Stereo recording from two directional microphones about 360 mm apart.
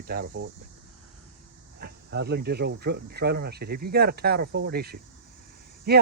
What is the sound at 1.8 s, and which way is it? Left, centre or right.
Speech, right.